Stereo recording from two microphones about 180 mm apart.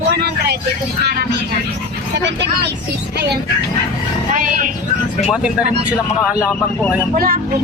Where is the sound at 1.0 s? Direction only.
65° right (ahead or behind).